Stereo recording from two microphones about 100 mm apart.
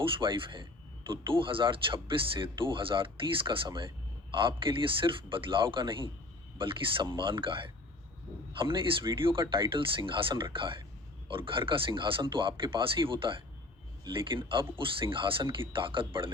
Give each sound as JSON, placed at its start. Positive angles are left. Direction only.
{"t": 0.0, "sound": "speech", "side_deg": -60}